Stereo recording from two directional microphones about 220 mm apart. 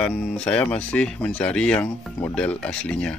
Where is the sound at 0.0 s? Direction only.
5° left (ahead or behind).